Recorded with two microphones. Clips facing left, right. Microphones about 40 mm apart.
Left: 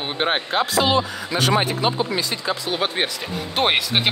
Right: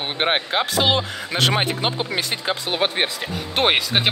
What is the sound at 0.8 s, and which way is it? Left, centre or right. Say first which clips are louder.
Speech: left 1 dB; right.